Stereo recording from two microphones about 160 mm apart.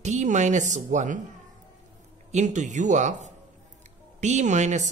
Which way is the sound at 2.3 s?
50° right (ahead or behind).